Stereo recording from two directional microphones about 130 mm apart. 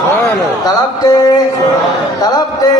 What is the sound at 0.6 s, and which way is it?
Music, 30° left (ahead or behind).